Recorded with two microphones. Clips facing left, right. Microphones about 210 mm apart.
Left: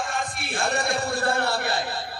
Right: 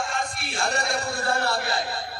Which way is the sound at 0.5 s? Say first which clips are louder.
Left 2 dB; 55° left (ahead or behind).